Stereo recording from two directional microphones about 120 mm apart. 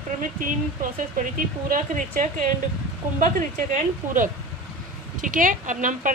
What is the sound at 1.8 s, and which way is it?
Speech, 90° right.